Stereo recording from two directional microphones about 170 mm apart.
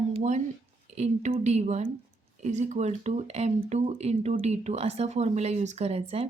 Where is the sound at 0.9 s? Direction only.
40° right (ahead or behind).